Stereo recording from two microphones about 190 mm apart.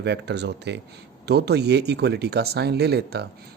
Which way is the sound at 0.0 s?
65° right (ahead or behind).